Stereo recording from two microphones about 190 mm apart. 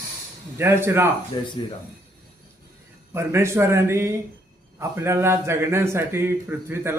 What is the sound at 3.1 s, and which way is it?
A man's voice, 15° right (ahead or behind).